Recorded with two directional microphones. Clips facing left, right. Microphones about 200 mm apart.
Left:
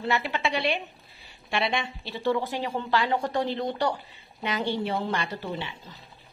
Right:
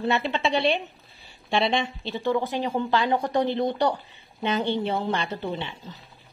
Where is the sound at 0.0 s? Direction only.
25° right (ahead or behind).